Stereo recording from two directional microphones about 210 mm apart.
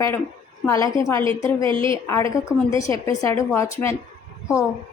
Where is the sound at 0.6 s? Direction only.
15° left (ahead or behind).